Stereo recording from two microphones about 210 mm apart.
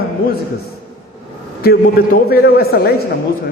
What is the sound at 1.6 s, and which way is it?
A man's voice, 45° left (ahead or behind).